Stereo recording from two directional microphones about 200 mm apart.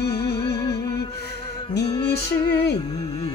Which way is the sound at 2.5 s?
55° left (ahead or behind).